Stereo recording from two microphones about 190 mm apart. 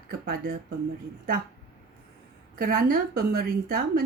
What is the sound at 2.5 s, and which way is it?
A woman's voice, 50° right (ahead or behind).